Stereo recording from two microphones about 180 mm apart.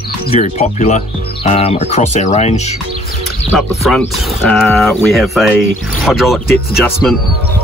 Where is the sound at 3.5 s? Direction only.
Centre (ahead or behind).